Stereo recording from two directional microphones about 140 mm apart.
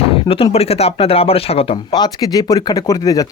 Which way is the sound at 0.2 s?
40° left (ahead or behind).